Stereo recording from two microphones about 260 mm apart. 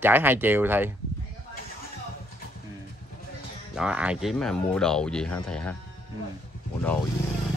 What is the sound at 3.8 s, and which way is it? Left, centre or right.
Speech, centre.